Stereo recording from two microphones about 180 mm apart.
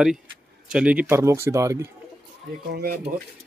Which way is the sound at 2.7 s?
60° right (ahead or behind).